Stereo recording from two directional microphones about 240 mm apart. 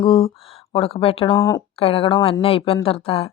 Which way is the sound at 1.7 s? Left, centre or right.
Left.